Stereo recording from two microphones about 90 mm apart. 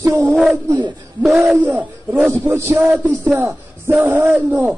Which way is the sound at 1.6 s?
15° right (ahead or behind).